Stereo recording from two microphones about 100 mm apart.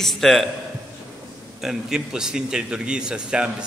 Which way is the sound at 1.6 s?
5° right (ahead or behind).